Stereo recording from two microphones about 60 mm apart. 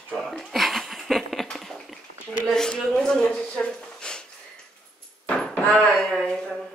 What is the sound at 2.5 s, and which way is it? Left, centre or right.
Speech, centre.